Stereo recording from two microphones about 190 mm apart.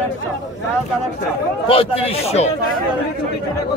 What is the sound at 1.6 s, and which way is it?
Speech, 30° left (ahead or behind).